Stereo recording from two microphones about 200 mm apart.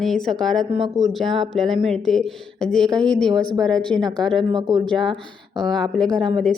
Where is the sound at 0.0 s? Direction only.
Centre (ahead or behind).